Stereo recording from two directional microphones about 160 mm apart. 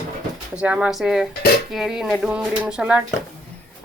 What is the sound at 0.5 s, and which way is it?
Speech, 5° right (ahead or behind).